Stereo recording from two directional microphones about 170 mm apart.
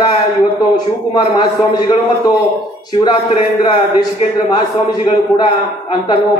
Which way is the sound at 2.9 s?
30° left (ahead or behind).